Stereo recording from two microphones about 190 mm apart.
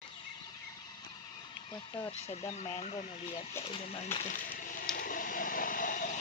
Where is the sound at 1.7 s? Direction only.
25° left (ahead or behind); by 4.9 s 45° left (ahead or behind).